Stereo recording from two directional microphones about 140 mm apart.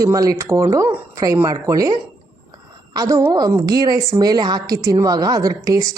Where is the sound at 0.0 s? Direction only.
25° right (ahead or behind).